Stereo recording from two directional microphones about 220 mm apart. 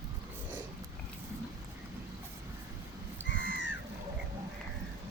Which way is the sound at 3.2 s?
55° left (ahead or behind).